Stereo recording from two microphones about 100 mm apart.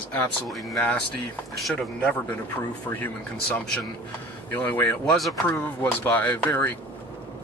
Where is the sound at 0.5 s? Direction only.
Centre (ahead or behind).